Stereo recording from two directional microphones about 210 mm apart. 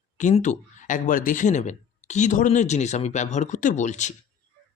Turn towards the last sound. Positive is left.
turn(degrees=35)  # may be behind; listen again after turning